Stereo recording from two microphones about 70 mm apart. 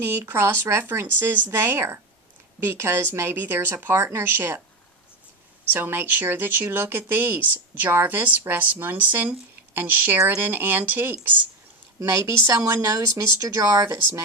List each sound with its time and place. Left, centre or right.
0.0 s speech: right
5.7 s speech: right
11.9 s speech: right
12.5 s speech: right
13.6 s speech: right